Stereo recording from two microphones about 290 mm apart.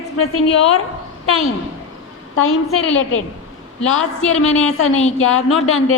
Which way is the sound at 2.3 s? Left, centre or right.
Left.